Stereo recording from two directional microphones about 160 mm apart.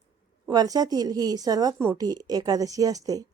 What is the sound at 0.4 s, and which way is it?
A woman's voice, 25° right (ahead or behind).